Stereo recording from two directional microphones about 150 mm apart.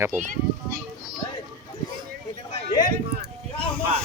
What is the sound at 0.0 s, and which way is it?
Speech, 15° right (ahead or behind).